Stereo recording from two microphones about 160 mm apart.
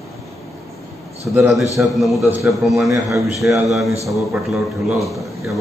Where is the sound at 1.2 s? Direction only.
10° right (ahead or behind).